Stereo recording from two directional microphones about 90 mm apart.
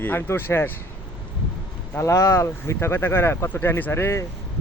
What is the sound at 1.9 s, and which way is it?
Speech, 35° left (ahead or behind).